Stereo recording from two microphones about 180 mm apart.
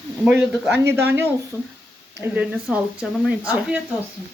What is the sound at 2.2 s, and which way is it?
Speech, 10° right (ahead or behind).